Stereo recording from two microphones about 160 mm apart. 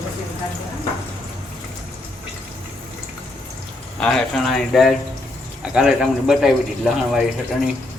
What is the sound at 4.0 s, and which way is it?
Speech, 5° left (ahead or behind).